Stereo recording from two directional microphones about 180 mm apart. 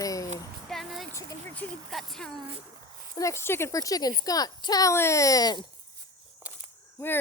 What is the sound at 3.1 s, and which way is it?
Speech, 15° left (ahead or behind).